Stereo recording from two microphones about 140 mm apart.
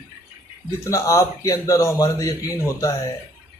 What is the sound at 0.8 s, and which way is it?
Speech, 20° left (ahead or behind).